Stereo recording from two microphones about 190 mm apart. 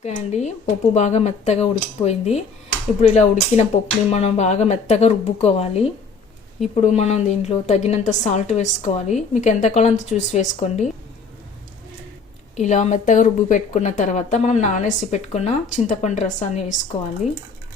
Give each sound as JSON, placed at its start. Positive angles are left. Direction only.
{"t": 0.0, "sound": "speech", "side_deg": 35}
{"t": 12.5, "sound": "speech", "side_deg": 35}